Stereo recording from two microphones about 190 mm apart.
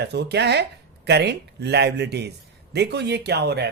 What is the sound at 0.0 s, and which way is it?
Speech, 60° right (ahead or behind).